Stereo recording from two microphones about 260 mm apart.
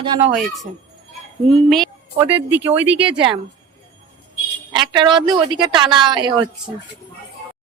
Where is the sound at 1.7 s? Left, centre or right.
Centre.